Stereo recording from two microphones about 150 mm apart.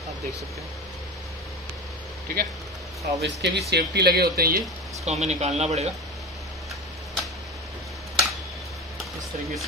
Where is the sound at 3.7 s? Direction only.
90° right.